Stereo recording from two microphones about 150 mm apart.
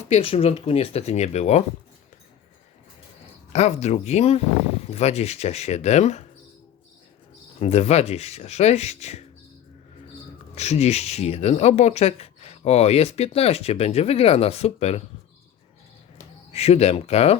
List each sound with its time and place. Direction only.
0.0 s speech: 40° left (ahead or behind)
3.5 s speech: 45° left (ahead or behind)
7.6 s speech: 45° left (ahead or behind)
10.5 s speech: 45° left (ahead or behind)
16.5 s speech: 45° left (ahead or behind)